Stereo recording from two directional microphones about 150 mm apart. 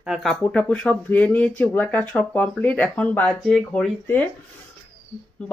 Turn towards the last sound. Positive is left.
turn(degrees=5)  # may be behind; listen again after turning